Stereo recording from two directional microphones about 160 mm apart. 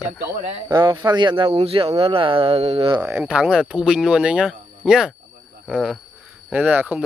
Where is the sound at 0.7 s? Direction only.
25° right (ahead or behind).